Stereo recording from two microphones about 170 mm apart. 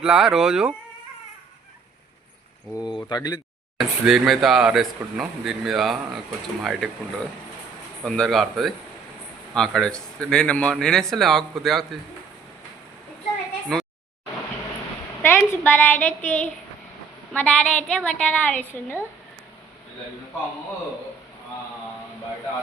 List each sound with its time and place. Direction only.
0.0 s speech: 5° right (ahead or behind)
2.7 s speech: 25° left (ahead or behind)
3.8 s speech: centre (ahead or behind)
8.0 s speech: 5° left (ahead or behind)
13.7 s speech: 5° left (ahead or behind)
15.2 s a woman's voice: 10° left (ahead or behind)